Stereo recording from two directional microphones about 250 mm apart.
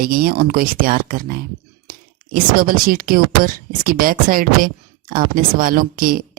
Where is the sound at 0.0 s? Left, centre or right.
Right.